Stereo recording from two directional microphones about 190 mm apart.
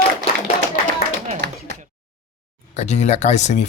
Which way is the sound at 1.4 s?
60° right (ahead or behind).